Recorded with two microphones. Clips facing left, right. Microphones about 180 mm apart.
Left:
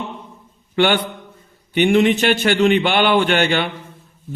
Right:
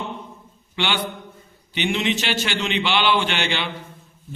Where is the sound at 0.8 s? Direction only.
50° left (ahead or behind).